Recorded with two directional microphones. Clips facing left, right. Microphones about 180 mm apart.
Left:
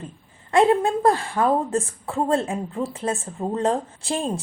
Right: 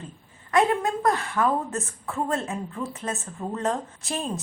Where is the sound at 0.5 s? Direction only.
30° left (ahead or behind).